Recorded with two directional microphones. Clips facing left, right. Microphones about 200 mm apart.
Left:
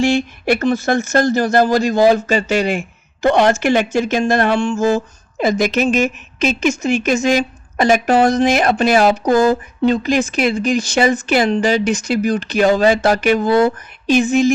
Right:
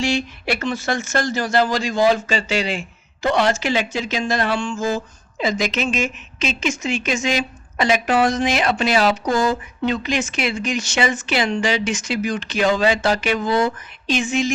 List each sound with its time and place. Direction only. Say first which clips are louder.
0.0 s a woman's voice: left 6 dB; 55° left (ahead or behind)
0.6 s a woman's voice: left 7 dB; 40° left (ahead or behind); by 9.6 s 55° left (ahead or behind)
9.8 s a woman's voice: left 7 dB; 40° left (ahead or behind)
13.5 s speech: left 6 dB; 55° left (ahead or behind)